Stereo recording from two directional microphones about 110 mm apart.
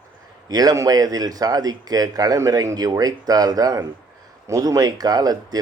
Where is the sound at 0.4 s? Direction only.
35° right (ahead or behind).